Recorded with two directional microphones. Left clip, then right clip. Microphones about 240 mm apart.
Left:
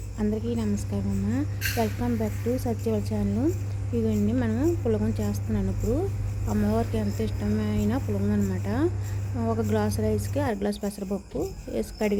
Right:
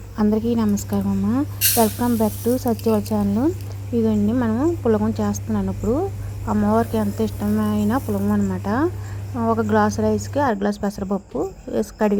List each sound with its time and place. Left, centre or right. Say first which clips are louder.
0.2 s a woman's voice: right 9 dB; right